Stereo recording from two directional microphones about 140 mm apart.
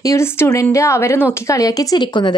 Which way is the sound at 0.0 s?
20° left (ahead or behind).